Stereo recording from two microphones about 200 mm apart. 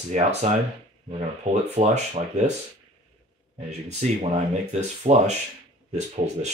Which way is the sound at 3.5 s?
30° right (ahead or behind).